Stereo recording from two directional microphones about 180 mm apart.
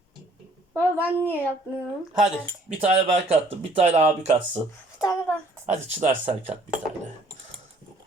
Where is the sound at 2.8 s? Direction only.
35° right (ahead or behind).